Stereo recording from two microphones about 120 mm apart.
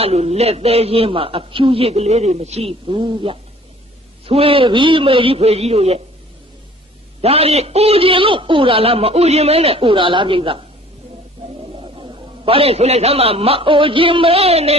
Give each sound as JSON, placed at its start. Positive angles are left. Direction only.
{"t": 0.0, "sound": "a man's voice", "side_deg": -60}
{"t": 7.2, "sound": "a man's voice", "side_deg": -55}
{"t": 11.8, "sound": "a man's voice", "side_deg": -50}